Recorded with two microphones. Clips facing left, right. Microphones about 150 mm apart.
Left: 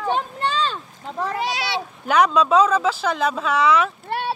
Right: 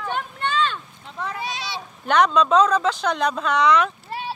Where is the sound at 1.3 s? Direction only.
80° left.